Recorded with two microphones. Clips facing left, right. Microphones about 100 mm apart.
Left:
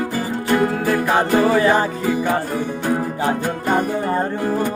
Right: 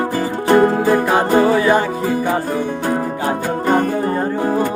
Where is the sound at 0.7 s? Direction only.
20° right (ahead or behind).